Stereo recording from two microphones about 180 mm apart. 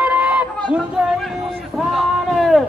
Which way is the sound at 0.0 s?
10° right (ahead or behind).